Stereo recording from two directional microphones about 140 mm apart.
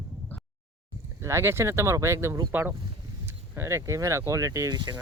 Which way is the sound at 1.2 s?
20° right (ahead or behind).